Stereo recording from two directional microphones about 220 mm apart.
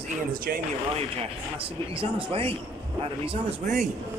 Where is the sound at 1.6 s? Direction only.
25° right (ahead or behind).